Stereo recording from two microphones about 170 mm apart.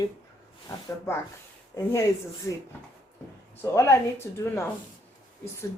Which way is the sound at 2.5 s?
15° left (ahead or behind).